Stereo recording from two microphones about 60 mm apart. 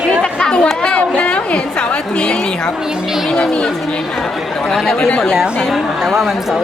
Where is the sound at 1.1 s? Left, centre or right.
Centre.